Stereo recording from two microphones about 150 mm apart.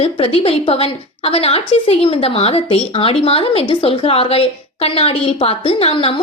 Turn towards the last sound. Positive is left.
turn(degrees=40)  # may be behind; listen again after turning